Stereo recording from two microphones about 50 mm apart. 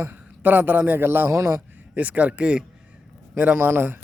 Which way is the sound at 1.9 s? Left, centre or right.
Right.